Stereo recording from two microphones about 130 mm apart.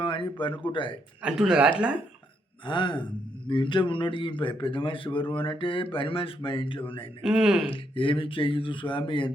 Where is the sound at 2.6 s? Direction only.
40° left (ahead or behind).